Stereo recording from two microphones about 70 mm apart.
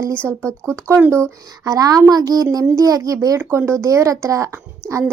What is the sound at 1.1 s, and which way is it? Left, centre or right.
A woman's voice, right.